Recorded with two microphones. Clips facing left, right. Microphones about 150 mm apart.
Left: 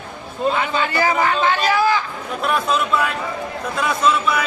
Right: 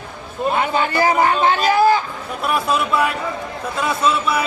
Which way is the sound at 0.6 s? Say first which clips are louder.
Right 2 dB; 45° right (ahead or behind).